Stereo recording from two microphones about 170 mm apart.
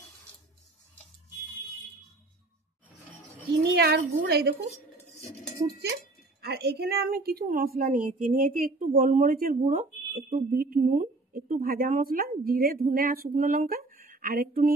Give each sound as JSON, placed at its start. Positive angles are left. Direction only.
{"t": 3.6, "sound": "a woman's voice", "side_deg": -70}
{"t": 6.4, "sound": "a woman's voice", "side_deg": -70}